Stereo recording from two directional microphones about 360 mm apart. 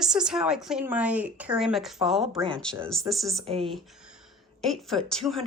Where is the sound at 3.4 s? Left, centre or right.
Centre.